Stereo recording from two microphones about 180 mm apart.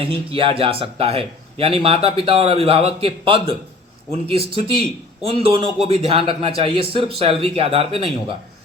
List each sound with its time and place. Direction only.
0.0 s a man's voice: 30° right (ahead or behind)